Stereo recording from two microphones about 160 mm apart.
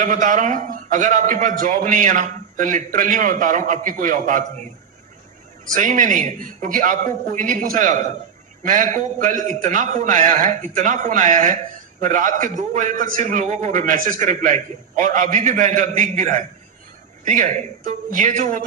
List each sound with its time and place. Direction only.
0.0 s a man's voice: 50° right (ahead or behind)
5.7 s a man's voice: 55° right (ahead or behind)